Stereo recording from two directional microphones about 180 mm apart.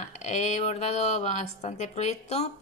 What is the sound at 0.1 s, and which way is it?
Speech, 40° left (ahead or behind).